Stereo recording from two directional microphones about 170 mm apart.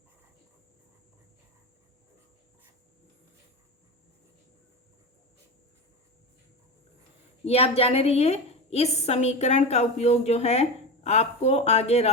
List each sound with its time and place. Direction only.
7.4 s a woman's voice: 35° left (ahead or behind)